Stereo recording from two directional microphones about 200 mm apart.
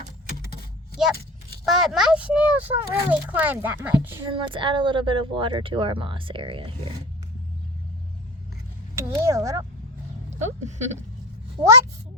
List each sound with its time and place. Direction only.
1.6 s a child's voice: centre (ahead or behind)
4.3 s speech: 25° right (ahead or behind)
9.0 s a child's voice: 15° right (ahead or behind)
10.2 s speech: 35° right (ahead or behind)